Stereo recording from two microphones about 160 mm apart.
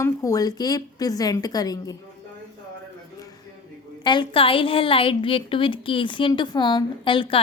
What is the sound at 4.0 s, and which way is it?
A woman's voice, 30° left (ahead or behind).